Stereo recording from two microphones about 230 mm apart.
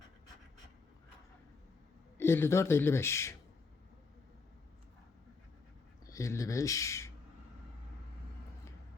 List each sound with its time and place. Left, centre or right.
2.1 s speech: centre
6.1 s speech: centre